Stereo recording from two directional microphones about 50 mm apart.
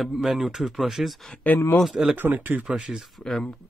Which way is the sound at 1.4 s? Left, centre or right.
Left.